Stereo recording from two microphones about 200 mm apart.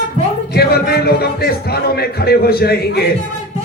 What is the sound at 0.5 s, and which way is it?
Speech, 55° left (ahead or behind).